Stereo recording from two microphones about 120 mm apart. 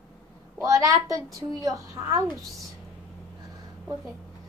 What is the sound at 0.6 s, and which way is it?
Child singing, 25° right (ahead or behind).